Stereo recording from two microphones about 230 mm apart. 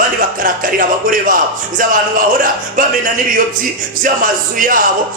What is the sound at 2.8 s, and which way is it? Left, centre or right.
Speech, right.